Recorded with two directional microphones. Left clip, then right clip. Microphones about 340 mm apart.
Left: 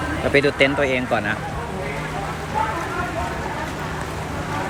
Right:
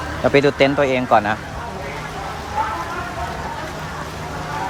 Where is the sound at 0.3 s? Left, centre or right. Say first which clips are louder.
Right 2 dB; centre.